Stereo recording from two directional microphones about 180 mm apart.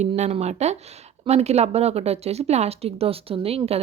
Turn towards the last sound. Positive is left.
turn(degrees=-35)  # may be behind; listen again after turning